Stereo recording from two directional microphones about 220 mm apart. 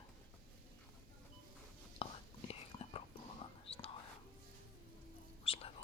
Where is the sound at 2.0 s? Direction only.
25° left (ahead or behind).